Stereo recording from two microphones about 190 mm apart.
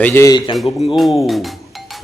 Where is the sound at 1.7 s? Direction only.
Centre (ahead or behind).